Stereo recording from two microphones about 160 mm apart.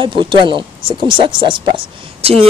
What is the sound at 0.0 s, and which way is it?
A man's voice, 30° right (ahead or behind).